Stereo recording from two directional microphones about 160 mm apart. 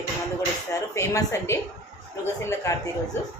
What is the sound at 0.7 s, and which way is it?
Speech, 20° left (ahead or behind).